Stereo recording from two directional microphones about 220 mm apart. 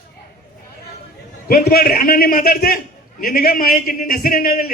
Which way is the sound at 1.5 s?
45° left (ahead or behind).